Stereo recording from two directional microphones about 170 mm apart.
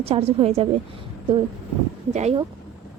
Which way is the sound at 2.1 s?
40° right (ahead or behind).